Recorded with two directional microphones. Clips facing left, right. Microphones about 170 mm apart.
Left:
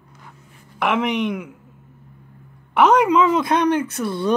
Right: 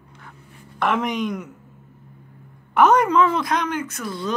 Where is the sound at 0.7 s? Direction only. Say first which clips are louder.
Left 2 dB; 5° left (ahead or behind).